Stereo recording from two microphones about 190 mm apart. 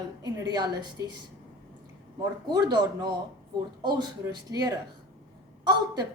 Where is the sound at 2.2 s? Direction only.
20° right (ahead or behind).